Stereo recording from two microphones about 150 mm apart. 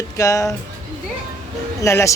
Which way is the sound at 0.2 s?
20° left (ahead or behind).